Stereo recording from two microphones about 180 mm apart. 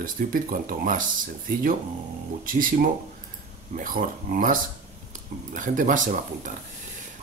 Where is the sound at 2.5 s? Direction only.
50° right (ahead or behind).